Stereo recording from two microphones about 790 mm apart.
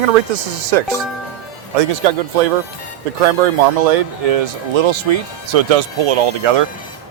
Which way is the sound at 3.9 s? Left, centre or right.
Right.